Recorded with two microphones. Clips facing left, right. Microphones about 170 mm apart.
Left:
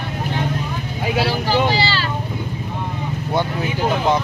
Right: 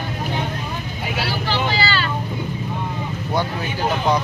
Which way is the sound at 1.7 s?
35° left (ahead or behind).